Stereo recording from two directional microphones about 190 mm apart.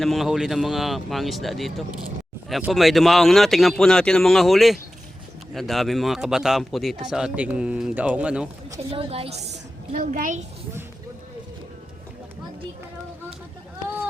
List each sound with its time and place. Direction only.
0.0 s speech: centre (ahead or behind)
8.9 s a woman's voice: 30° right (ahead or behind)
9.9 s a child's voice: 45° right (ahead or behind)